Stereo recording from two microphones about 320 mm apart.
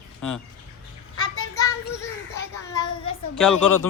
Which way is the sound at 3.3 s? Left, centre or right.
Centre.